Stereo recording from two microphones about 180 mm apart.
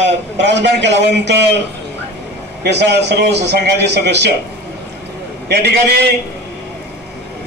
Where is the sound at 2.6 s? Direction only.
65° right (ahead or behind).